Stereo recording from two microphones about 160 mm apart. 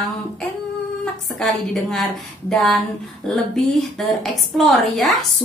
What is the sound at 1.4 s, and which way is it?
A woman's voice, 5° left (ahead or behind).